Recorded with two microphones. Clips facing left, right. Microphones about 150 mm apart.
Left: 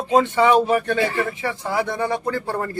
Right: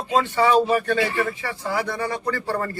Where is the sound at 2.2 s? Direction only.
5° left (ahead or behind).